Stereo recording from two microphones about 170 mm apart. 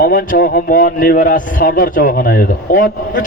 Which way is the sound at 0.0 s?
60° left (ahead or behind).